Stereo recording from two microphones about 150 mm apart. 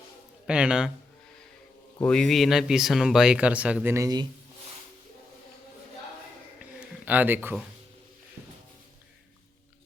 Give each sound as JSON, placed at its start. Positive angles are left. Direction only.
{"t": 0.4, "sound": "speech", "side_deg": -5}
{"t": 2.0, "sound": "speech", "side_deg": 5}
{"t": 3.9, "sound": "speech", "side_deg": -25}
{"t": 6.6, "sound": "a sound", "side_deg": -10}